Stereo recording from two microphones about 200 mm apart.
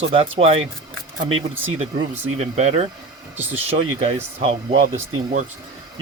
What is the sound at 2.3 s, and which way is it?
Speech, 35° right (ahead or behind).